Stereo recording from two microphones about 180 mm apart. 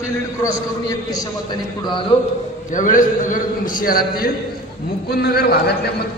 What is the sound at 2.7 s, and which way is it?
A man's voice, 50° left (ahead or behind).